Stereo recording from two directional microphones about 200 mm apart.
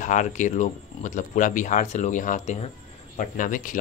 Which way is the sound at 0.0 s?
40° left (ahead or behind).